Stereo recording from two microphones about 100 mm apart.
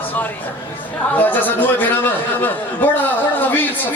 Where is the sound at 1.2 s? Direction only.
20° left (ahead or behind).